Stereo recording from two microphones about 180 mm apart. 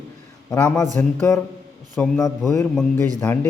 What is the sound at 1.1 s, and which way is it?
A man's voice, centre (ahead or behind).